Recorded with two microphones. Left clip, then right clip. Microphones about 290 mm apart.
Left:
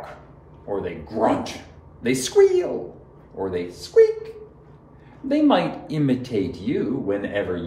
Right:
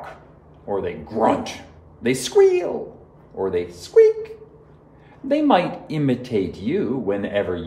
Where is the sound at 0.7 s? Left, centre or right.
Right.